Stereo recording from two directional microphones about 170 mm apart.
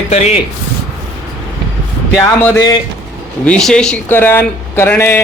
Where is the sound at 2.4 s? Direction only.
15° left (ahead or behind).